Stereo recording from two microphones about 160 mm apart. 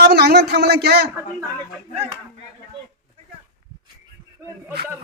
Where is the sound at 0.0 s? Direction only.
90° right.